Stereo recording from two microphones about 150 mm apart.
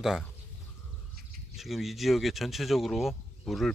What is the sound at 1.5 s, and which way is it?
Speech, centre (ahead or behind).